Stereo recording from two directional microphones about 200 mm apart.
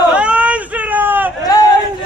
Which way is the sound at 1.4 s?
20° left (ahead or behind).